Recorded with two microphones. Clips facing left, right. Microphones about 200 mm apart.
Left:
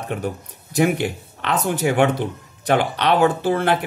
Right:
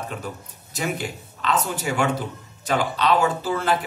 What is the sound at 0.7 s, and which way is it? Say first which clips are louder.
A man's voice: left 9 dB; 60° left (ahead or behind).